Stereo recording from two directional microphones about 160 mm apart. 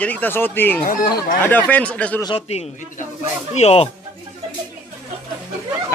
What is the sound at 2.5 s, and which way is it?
A man's voice, 40° left (ahead or behind).